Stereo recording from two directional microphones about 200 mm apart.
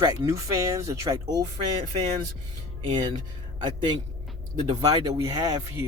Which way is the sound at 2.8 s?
25° right (ahead or behind).